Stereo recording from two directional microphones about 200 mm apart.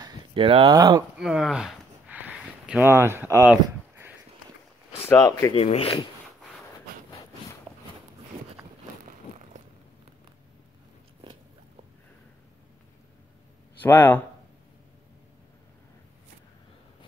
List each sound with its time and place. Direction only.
0.0 s speech: 25° right (ahead or behind)
1.1 s a sound: 5° right (ahead or behind)
5.0 s speech: 15° left (ahead or behind)
5.5 s speech: 30° left (ahead or behind)
13.7 s speech: 10° left (ahead or behind)